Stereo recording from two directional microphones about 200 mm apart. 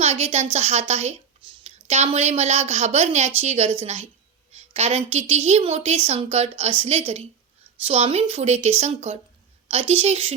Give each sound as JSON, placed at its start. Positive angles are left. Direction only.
{"t": 0.0, "sound": "a woman's voice", "side_deg": -30}